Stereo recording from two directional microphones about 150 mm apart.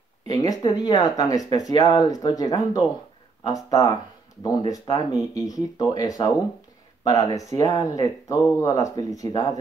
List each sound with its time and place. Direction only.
0.3 s speech: 25° left (ahead or behind)